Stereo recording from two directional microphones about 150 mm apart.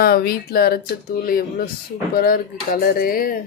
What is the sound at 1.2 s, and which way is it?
Speech, 75° left (ahead or behind).